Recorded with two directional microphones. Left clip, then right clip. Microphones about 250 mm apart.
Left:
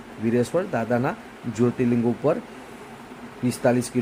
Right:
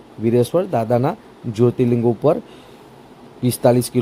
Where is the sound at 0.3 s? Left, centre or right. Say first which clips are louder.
Right 6 dB; right.